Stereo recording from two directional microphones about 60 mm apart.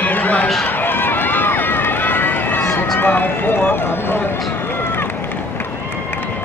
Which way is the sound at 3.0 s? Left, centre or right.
Left.